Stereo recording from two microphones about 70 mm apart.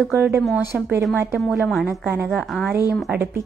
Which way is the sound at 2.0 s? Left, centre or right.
Right.